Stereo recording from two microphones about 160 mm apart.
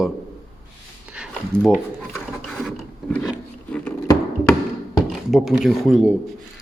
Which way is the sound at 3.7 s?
10° left (ahead or behind).